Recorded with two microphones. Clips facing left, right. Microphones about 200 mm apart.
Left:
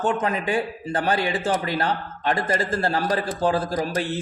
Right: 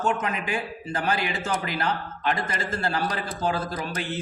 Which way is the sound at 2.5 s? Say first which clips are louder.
Left 5 dB; 35° left (ahead or behind).